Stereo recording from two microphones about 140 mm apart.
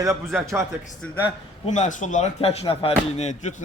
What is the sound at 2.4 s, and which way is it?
Speech, 45° left (ahead or behind).